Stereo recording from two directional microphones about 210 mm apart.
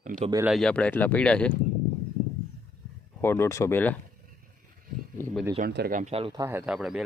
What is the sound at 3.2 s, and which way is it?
Speech, 10° left (ahead or behind).